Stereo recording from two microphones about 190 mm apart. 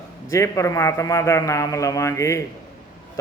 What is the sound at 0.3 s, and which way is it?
A man's voice, 15° left (ahead or behind).